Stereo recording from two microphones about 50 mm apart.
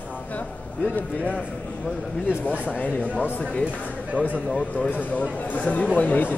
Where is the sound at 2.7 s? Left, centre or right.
Left.